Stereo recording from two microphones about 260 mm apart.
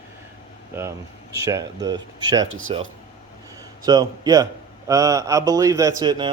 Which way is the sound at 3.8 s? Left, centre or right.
Centre.